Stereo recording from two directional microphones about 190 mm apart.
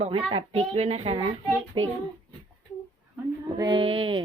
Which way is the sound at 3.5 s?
20° right (ahead or behind).